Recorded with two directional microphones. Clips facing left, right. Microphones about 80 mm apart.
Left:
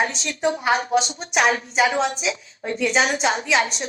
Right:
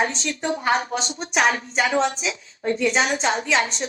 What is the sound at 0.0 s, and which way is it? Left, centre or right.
Speech, right.